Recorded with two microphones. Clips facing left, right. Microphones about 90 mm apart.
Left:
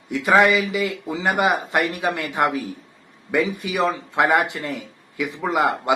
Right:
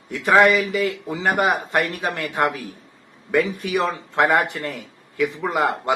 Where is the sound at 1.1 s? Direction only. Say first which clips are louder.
Left 1 dB; 15° left (ahead or behind).